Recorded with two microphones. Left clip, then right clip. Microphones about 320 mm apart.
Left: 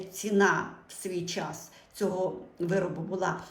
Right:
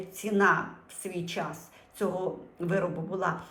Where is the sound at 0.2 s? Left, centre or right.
Centre.